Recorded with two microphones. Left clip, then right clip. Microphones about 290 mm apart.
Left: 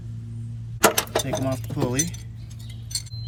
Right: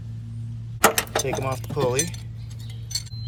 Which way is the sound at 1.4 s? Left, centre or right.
Centre.